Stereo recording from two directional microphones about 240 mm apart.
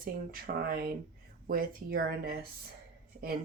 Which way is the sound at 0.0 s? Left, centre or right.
Right.